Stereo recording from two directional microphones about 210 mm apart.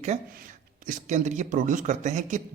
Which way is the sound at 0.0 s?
35° right (ahead or behind).